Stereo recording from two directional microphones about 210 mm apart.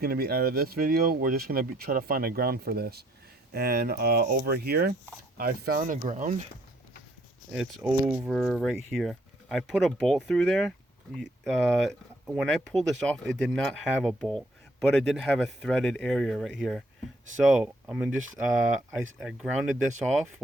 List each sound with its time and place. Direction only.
0.0 s speech: 45° right (ahead or behind)
7.5 s speech: 5° right (ahead or behind)